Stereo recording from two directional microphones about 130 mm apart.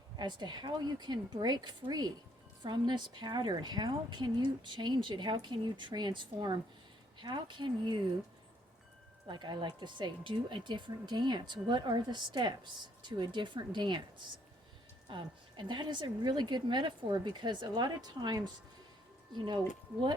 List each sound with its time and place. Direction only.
0.2 s speech: 35° right (ahead or behind)
9.2 s speech: 35° right (ahead or behind)
15.0 s speech: 40° right (ahead or behind)